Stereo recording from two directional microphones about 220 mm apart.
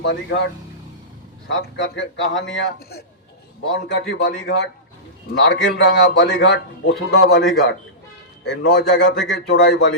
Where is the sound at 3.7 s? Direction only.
55° left (ahead or behind).